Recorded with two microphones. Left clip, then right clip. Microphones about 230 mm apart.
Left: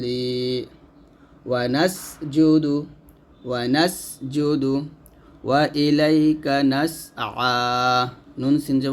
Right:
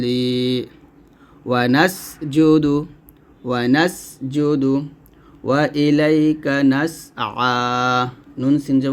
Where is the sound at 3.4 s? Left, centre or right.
Right.